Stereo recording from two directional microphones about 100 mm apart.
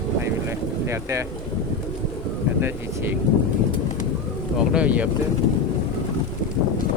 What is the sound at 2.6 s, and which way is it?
Speech, 20° right (ahead or behind).